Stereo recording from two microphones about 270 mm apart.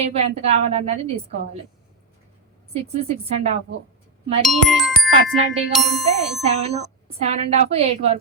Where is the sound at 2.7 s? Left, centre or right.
Right.